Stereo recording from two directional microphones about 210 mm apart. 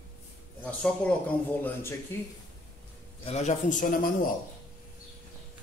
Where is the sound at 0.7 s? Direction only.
5° left (ahead or behind).